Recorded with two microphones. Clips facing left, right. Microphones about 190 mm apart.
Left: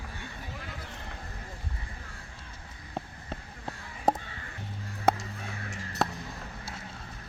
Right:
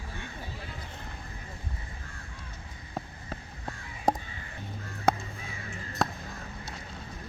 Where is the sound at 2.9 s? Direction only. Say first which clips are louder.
Even; centre (ahead or behind).